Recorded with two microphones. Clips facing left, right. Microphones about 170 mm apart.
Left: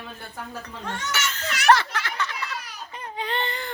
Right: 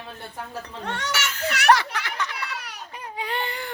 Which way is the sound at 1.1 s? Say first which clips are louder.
Right 3 dB; 10° right (ahead or behind).